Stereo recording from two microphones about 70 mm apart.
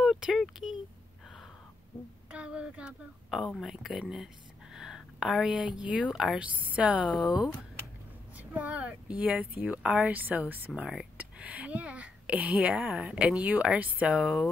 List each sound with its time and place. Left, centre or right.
0.0 s speech: centre
2.3 s speech: centre
8.4 s speech: right